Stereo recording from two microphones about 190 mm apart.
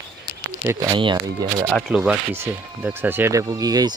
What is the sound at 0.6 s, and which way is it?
Speech, 15° right (ahead or behind).